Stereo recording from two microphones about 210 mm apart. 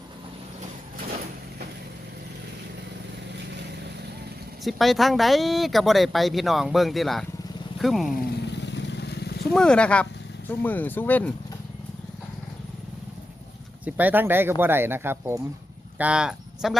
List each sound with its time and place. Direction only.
4.6 s speech: centre (ahead or behind)
8.5 s vehicle: 55° left (ahead or behind)
9.5 s speech: 5° left (ahead or behind)
13.8 s speech: 5° right (ahead or behind)